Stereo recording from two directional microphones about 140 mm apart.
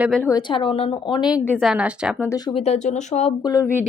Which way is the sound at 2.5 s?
50° left (ahead or behind).